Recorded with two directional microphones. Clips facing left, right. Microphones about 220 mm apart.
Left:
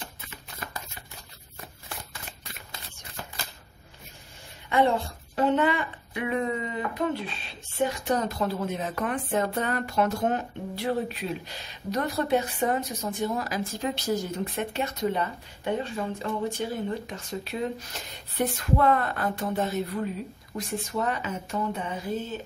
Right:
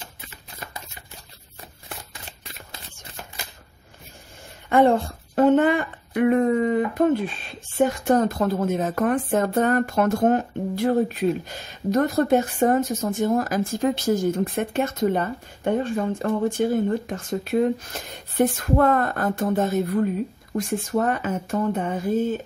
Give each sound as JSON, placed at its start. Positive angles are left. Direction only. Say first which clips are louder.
{"t": 4.6, "sound": "speech", "louder": "right 6 dB", "side_deg": -50}